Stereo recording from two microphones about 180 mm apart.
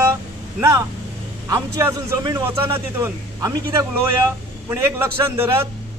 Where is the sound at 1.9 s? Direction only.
20° right (ahead or behind).